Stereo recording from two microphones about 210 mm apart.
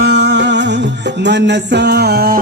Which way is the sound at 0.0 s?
55° right (ahead or behind).